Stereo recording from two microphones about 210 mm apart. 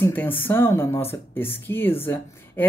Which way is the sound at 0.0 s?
10° left (ahead or behind).